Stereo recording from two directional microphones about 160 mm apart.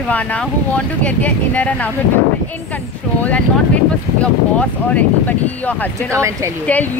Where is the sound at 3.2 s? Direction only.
10° left (ahead or behind).